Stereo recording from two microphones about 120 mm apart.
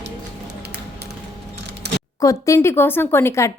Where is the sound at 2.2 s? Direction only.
30° left (ahead or behind).